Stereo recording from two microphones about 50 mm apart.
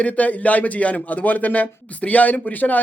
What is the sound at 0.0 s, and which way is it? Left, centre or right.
Speech, left.